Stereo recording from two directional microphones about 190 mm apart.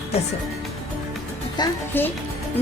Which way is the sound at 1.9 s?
10° left (ahead or behind).